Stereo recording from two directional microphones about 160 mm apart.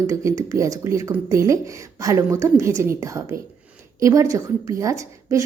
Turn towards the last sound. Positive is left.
turn(degrees=-20)  # may be behind; listen again after turning